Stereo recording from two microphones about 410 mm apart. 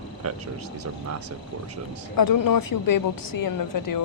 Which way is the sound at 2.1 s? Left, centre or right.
Left.